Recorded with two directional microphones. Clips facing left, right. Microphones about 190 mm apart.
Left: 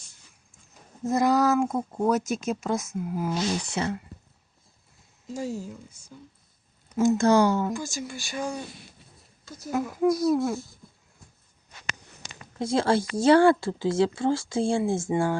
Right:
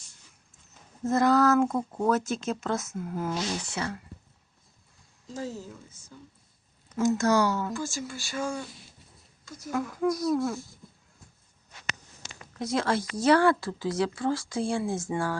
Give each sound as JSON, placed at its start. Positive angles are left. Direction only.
{"t": 1.0, "sound": "speech", "side_deg": 15}
{"t": 3.8, "sound": "speech", "side_deg": 25}
{"t": 5.3, "sound": "speech", "side_deg": 10}
{"t": 6.9, "sound": "speech", "side_deg": 25}
{"t": 7.7, "sound": "speech", "side_deg": 15}
{"t": 12.5, "sound": "speech", "side_deg": 30}